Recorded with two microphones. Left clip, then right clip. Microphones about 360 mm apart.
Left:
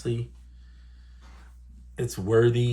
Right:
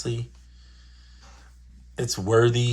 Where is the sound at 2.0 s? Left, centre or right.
Centre.